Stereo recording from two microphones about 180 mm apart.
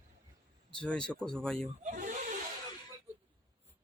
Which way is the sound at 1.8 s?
45° right (ahead or behind).